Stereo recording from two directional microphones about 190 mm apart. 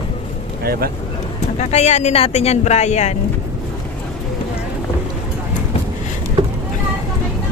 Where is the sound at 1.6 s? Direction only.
35° left (ahead or behind).